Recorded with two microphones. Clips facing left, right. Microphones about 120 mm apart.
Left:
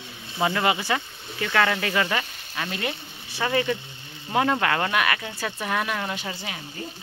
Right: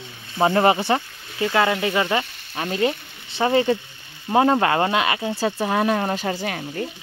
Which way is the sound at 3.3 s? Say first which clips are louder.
Right 6 dB; 25° right (ahead or behind).